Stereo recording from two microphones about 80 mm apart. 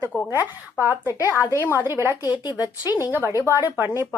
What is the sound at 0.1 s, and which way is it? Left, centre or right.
A woman's voice, left.